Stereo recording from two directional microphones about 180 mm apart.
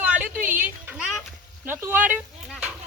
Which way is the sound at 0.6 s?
5° right (ahead or behind).